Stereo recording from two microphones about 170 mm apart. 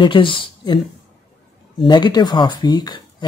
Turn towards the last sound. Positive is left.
turn(degrees=25)  # may be behind; listen again after turning